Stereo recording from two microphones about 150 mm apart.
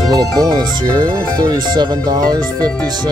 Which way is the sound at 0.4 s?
25° right (ahead or behind).